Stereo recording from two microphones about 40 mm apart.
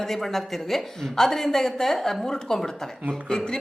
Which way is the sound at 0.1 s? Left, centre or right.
Centre.